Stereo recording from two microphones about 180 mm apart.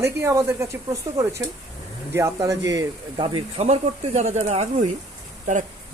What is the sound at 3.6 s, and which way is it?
Speech, 35° right (ahead or behind).